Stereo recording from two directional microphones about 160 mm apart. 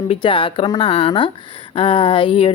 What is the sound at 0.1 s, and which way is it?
Speech, 35° left (ahead or behind).